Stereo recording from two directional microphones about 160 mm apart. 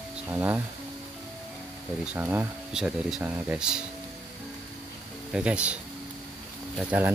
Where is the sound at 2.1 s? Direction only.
10° right (ahead or behind).